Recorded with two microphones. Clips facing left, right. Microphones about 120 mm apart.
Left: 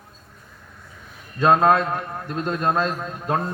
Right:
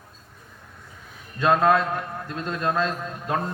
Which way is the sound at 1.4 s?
30° left (ahead or behind).